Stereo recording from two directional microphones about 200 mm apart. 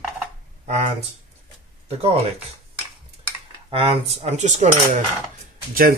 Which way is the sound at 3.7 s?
30° right (ahead or behind).